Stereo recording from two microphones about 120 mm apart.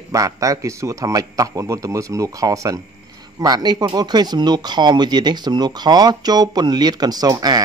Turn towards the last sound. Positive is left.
turn(degrees=-30)  # may be behind; listen again after turning